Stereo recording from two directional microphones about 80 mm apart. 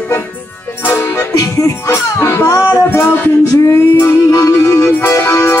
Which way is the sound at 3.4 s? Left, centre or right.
Left.